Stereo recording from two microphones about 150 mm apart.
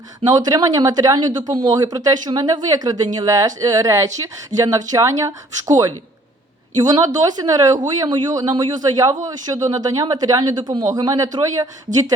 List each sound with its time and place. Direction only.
0.3 s speech: 25° right (ahead or behind)